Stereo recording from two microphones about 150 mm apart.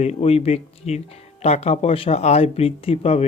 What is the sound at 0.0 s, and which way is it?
Speech, 45° left (ahead or behind).